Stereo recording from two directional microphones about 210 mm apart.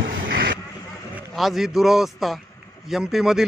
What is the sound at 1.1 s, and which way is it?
Speech, centre (ahead or behind).